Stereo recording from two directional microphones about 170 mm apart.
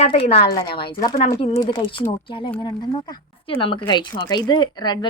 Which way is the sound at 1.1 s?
40° left (ahead or behind).